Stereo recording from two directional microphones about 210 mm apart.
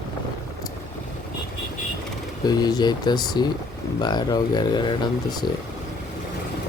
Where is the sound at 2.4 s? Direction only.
20° left (ahead or behind).